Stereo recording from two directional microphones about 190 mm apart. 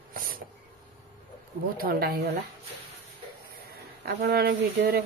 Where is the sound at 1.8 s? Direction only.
55° right (ahead or behind).